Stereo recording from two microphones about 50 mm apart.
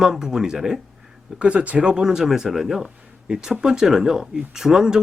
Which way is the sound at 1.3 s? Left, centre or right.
Right.